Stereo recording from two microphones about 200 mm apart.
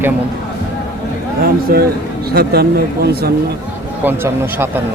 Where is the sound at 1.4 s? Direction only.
50° right (ahead or behind).